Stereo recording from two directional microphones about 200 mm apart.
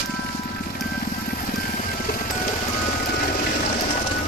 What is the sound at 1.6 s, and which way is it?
Vehicle, 45° left (ahead or behind).